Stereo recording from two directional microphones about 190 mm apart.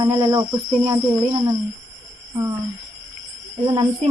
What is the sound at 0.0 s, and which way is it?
Speech, 15° right (ahead or behind).